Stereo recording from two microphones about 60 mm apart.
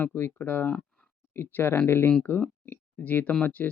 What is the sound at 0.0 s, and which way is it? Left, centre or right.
Speech, left.